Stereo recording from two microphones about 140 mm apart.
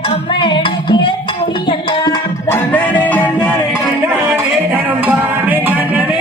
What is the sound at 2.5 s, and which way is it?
Music, 15° left (ahead or behind).